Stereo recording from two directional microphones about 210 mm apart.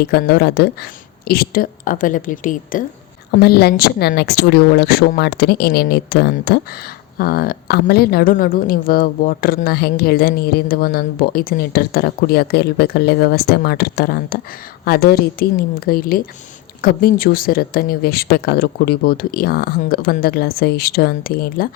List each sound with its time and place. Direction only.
0.1 s a woman's voice: 50° left (ahead or behind)